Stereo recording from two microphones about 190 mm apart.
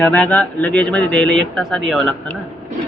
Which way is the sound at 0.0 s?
5° left (ahead or behind).